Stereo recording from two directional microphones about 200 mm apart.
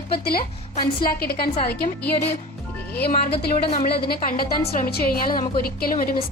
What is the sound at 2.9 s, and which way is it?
A woman's voice, 55° left (ahead or behind).